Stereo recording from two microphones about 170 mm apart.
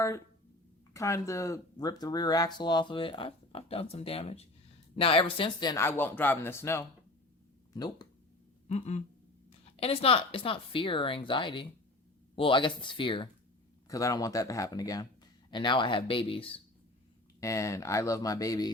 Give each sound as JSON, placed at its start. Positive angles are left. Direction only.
{"t": 0.9, "sound": "speech", "side_deg": 15}
{"t": 5.8, "sound": "speech", "side_deg": 10}
{"t": 8.7, "sound": "speech", "side_deg": 40}
{"t": 17.4, "sound": "speech", "side_deg": 20}